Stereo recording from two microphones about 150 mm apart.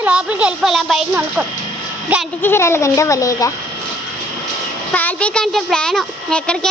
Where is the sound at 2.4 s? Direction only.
15° left (ahead or behind).